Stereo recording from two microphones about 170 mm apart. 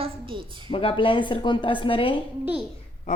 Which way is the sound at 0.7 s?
35° left (ahead or behind).